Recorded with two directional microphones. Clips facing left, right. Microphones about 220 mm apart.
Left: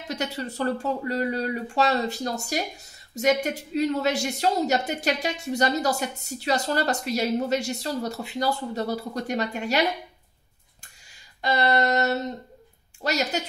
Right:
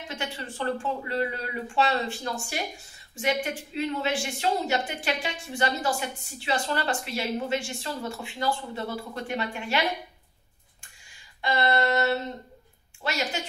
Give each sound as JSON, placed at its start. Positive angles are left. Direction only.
{"t": 0.1, "sound": "speech", "side_deg": 40}
{"t": 11.4, "sound": "speech", "side_deg": 40}